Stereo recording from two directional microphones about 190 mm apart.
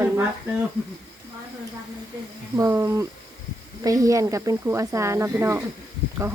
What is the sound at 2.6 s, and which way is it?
Speech, 15° right (ahead or behind).